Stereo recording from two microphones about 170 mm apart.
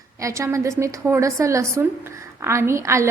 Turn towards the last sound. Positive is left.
turn(degrees=-15)  # may be behind; listen again after turning